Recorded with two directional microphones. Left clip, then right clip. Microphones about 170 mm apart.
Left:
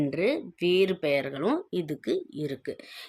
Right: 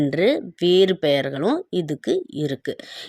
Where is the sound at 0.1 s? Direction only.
30° right (ahead or behind).